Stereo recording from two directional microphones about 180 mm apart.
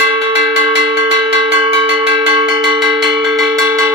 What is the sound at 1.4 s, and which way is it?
Cowbell, 30° right (ahead or behind).